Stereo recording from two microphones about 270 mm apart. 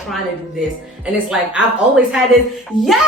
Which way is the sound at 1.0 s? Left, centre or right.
Centre.